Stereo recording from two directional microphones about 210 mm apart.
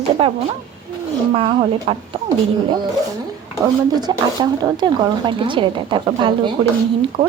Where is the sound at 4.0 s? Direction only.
20° right (ahead or behind).